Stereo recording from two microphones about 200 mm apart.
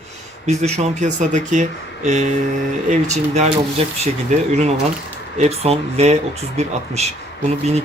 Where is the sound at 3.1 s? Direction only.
35° right (ahead or behind).